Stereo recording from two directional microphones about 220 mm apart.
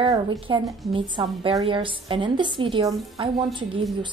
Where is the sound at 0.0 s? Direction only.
20° right (ahead or behind).